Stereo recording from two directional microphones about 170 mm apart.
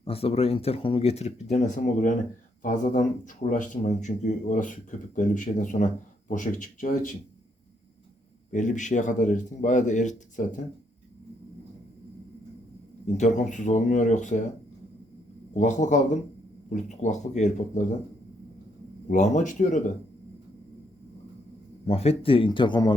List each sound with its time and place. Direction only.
0.0 s speech: 35° left (ahead or behind)
8.5 s speech: 45° left (ahead or behind)
13.1 s speech: 45° left (ahead or behind)
15.5 s speech: 45° left (ahead or behind)
19.1 s speech: 45° left (ahead or behind)
21.8 s speech: 35° left (ahead or behind)